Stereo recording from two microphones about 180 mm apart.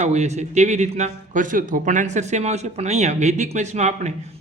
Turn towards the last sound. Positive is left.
turn(degrees=-40)  # may be behind; listen again after turning